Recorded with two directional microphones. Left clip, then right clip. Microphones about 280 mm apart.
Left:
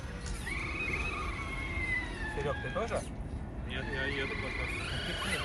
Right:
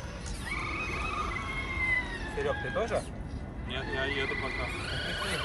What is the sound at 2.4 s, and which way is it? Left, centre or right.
Emergency vehicle, right.